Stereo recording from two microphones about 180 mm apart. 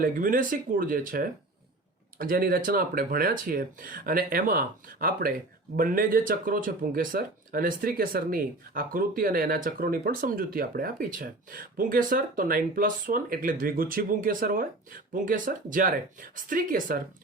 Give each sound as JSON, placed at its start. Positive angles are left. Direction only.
{"t": 0.0, "sound": "speech", "side_deg": -50}